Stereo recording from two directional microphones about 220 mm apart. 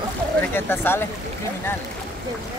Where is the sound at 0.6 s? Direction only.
10° left (ahead or behind).